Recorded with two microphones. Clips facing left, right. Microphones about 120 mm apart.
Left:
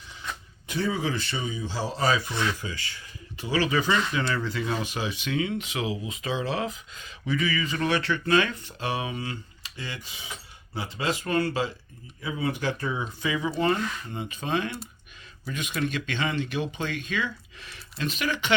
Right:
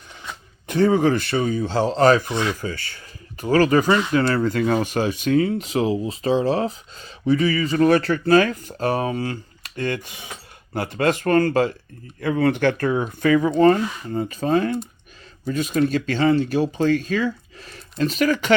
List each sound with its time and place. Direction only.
0.7 s speech: 55° right (ahead or behind)
2.3 s speech: 20° right (ahead or behind)
2.6 s speech: 45° right (ahead or behind)
9.6 s speech: 55° right (ahead or behind)
12.2 s speech: 65° right (ahead or behind)
13.6 s speech: 45° right (ahead or behind)